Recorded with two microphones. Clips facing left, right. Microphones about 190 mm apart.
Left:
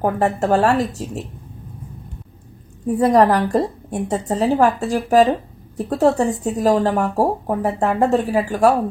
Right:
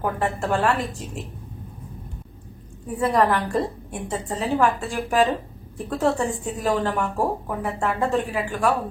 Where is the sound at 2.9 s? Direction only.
40° left (ahead or behind).